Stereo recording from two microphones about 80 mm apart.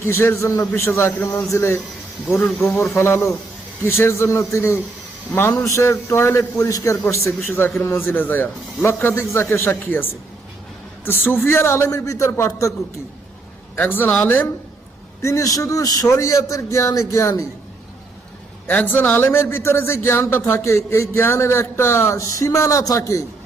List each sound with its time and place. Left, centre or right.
0.0 s a man's voice: left
7.0 s a man's voice: left
13.7 s speech: left
15.2 s a man's voice: left
18.7 s a man's voice: left